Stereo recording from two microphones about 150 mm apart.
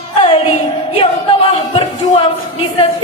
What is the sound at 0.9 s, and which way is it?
Speech, 40° left (ahead or behind).